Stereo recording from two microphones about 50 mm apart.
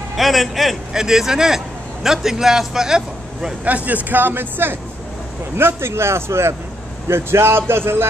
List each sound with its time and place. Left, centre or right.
0.1 s a man's voice: centre
3.6 s speech: right